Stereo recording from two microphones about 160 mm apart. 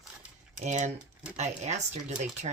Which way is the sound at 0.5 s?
45° right (ahead or behind).